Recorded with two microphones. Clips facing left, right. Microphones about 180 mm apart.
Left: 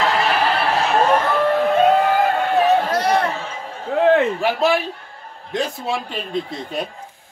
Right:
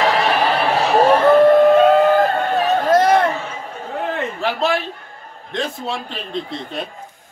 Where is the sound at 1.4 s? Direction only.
40° right (ahead or behind).